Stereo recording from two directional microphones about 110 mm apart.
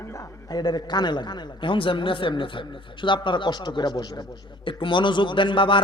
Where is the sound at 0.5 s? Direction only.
40° left (ahead or behind).